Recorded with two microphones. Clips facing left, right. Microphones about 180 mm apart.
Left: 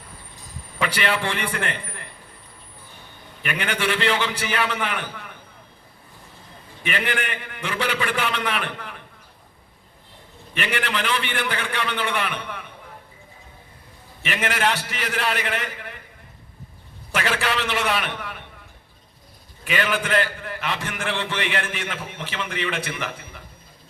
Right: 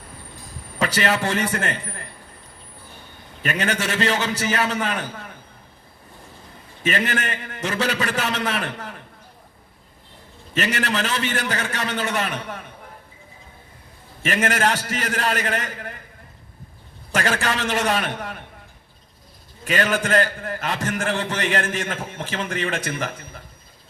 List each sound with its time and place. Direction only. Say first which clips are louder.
0.8 s a man's voice: right 2 dB; 40° right (ahead or behind)
3.4 s a man's voice: right 1 dB; 40° right (ahead or behind)
6.8 s a man's voice: right 3 dB; 40° right (ahead or behind)
10.5 s a man's voice: right 3 dB; 40° right (ahead or behind)
14.2 s a man's voice: right 3 dB; 45° right (ahead or behind)
17.2 s a man's voice: right 1 dB; 45° right (ahead or behind)
19.6 s a man's voice: right 2 dB; 45° right (ahead or behind)